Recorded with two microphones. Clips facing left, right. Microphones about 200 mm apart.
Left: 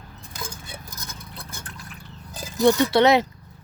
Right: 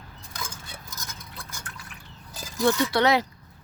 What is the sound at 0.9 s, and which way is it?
Fill, 30° left (ahead or behind).